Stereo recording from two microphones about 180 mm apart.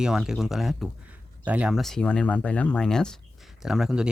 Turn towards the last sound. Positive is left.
turn(degrees=-5)  # may be behind; listen again after turning